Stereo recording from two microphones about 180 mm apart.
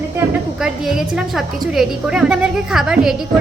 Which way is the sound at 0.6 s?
5° right (ahead or behind).